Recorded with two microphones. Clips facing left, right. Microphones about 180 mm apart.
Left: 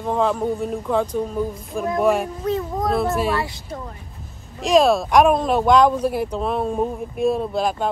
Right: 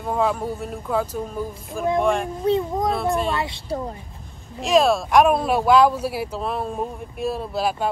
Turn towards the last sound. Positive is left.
turn(degrees=-5)  # may be behind; listen again after turning